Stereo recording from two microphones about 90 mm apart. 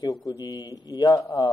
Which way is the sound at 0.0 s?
45° left (ahead or behind).